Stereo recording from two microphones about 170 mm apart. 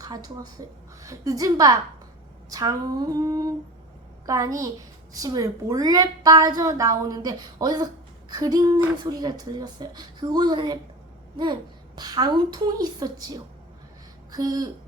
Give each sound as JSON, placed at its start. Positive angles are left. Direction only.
{"t": 0.0, "sound": "a woman's voice", "side_deg": -20}
{"t": 11.9, "sound": "a woman's voice", "side_deg": -25}